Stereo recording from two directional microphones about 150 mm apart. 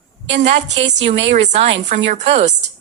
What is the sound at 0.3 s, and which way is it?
A woman's voice, 45° right (ahead or behind).